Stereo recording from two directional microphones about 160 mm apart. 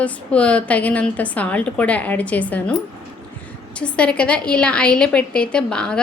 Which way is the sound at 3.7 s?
5° left (ahead or behind).